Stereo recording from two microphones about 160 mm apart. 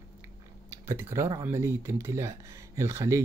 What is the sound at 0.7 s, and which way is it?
Speech, 15° right (ahead or behind).